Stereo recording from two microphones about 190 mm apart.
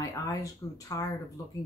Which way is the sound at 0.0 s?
20° left (ahead or behind).